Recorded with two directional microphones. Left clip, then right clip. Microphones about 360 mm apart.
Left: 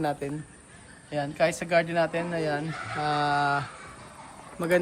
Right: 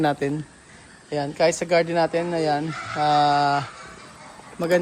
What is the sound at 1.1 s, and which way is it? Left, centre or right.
Speech, centre.